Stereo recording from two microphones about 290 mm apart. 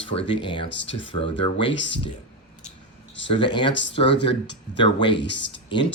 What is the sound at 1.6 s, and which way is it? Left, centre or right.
Speech, left.